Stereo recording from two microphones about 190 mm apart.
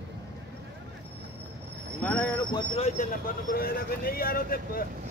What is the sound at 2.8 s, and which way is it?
Speech, 45° left (ahead or behind).